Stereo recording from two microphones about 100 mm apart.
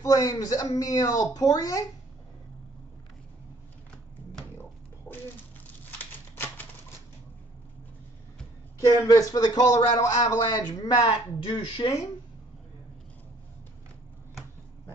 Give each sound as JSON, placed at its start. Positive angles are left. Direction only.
{"t": 0.0, "sound": "speech", "side_deg": 35}
{"t": 5.9, "sound": "typewriter", "side_deg": 20}
{"t": 8.8, "sound": "speech", "side_deg": 35}
{"t": 11.3, "sound": "speech", "side_deg": 55}